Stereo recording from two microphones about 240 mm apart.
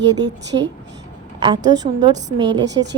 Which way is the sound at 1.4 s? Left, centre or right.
Centre.